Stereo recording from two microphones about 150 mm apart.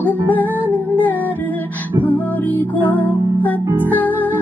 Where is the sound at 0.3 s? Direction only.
10° left (ahead or behind).